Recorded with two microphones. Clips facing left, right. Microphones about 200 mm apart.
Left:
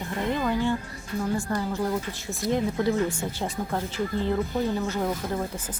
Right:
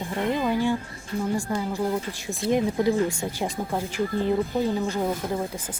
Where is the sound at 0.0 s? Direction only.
15° right (ahead or behind).